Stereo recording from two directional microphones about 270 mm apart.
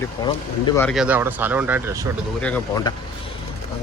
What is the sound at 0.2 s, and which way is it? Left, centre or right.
Speech, centre.